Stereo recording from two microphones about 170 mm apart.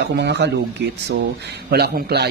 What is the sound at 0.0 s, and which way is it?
Speech, 90° right.